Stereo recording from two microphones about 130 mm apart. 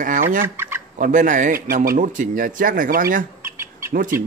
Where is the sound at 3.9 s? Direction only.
90° right.